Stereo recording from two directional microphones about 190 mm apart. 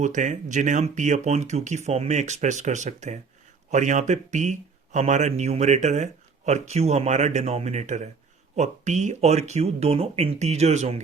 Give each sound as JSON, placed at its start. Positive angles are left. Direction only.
{"t": 0.0, "sound": "speech", "side_deg": -40}